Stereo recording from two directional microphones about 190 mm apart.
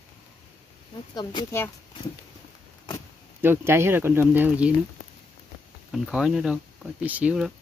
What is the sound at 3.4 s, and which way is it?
Speech, 10° right (ahead or behind).